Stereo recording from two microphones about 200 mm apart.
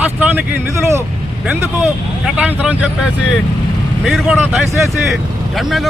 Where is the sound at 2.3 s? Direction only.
5° right (ahead or behind).